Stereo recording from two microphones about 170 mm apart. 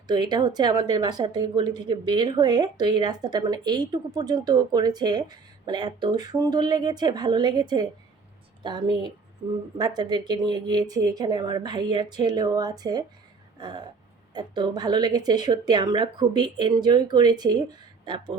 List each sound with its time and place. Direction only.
0.1 s speech: 25° right (ahead or behind)